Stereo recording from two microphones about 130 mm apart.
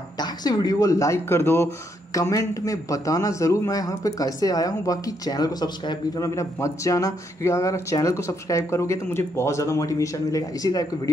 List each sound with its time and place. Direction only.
0.2 s a man's voice: 30° left (ahead or behind)